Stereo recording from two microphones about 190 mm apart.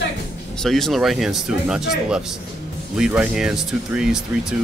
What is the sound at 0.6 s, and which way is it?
Speech, centre (ahead or behind).